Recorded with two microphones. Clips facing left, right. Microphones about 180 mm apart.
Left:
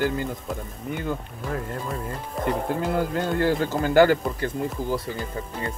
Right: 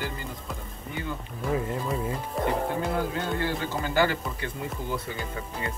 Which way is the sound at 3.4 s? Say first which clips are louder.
Left 7 dB; 50° left (ahead or behind).